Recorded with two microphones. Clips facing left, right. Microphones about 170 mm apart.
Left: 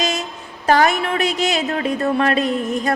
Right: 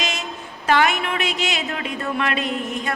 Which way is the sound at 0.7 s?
40° left (ahead or behind).